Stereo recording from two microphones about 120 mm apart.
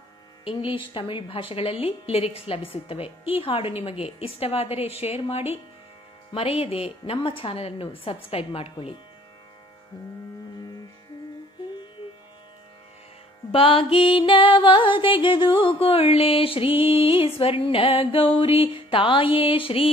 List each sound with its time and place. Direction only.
0.5 s music: 45° left (ahead or behind)
13.5 s music: 45° left (ahead or behind)